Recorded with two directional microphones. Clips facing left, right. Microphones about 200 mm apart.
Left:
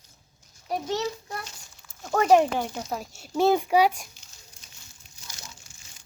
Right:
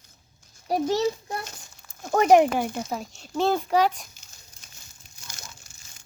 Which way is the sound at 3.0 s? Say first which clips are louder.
Left 4 dB; 10° left (ahead or behind).